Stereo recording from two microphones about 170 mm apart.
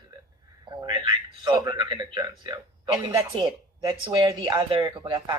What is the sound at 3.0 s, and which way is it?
A woman's voice, 30° right (ahead or behind).